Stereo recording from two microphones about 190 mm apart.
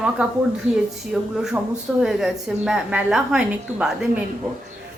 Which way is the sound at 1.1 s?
5° right (ahead or behind).